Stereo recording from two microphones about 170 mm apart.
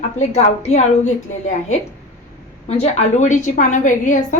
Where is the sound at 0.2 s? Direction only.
40° left (ahead or behind).